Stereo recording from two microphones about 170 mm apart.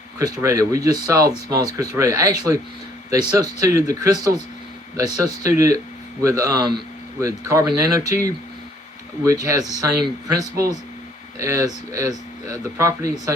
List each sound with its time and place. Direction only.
0.2 s speech: 20° right (ahead or behind)
9.2 s speech: 20° right (ahead or behind)